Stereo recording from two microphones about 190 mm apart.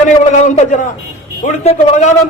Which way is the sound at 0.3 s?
40° left (ahead or behind).